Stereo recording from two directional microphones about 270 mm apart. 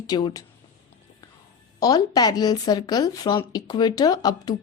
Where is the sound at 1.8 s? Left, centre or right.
Centre.